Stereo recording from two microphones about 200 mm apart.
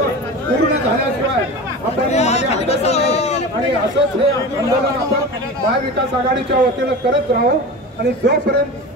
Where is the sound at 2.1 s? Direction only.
35° left (ahead or behind).